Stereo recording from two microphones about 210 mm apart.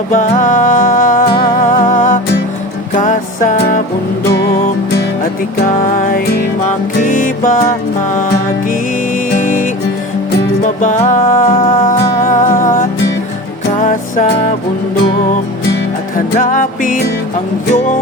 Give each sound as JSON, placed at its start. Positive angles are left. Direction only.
{"t": 0.1, "sound": "music", "side_deg": 35}
{"t": 1.3, "sound": "music", "side_deg": 25}
{"t": 1.9, "sound": "music", "side_deg": 40}
{"t": 4.9, "sound": "music", "side_deg": 45}
{"t": 9.4, "sound": "music", "side_deg": 40}
{"t": 16.1, "sound": "music", "side_deg": 40}